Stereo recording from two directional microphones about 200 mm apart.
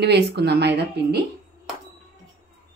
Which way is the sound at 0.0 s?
55° right (ahead or behind).